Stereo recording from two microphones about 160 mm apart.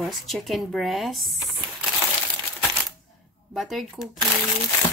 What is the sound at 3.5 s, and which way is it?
Speech, centre (ahead or behind).